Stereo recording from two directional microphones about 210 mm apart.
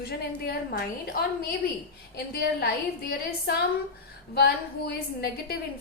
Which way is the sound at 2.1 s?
50° left (ahead or behind).